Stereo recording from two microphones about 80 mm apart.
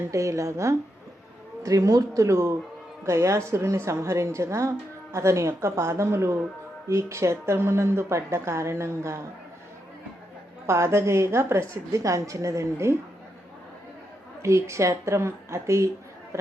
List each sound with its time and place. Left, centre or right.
0.1 s a woman's voice: right
10.7 s a woman's voice: right
14.4 s a woman's voice: right